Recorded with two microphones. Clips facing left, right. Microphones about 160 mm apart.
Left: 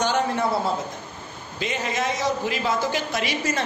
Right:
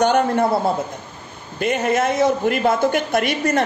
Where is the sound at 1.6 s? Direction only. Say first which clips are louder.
Right 8 dB; 55° right (ahead or behind).